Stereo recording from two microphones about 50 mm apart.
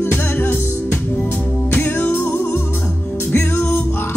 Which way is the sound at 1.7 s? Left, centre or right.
Left.